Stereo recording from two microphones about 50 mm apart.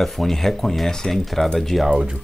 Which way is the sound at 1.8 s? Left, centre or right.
Centre.